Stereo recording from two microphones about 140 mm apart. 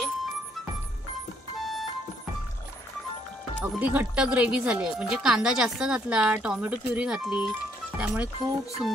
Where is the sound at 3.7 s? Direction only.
5° right (ahead or behind).